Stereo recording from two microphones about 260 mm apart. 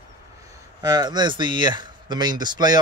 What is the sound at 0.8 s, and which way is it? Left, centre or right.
Speech, centre.